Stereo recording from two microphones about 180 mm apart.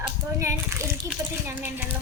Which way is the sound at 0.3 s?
15° right (ahead or behind).